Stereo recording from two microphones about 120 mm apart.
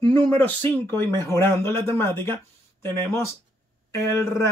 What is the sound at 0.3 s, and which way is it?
Speech, 15° left (ahead or behind).